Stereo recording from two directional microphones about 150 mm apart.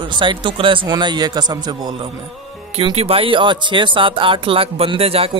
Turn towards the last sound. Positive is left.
turn(degrees=-40)  # may be behind; listen again after turning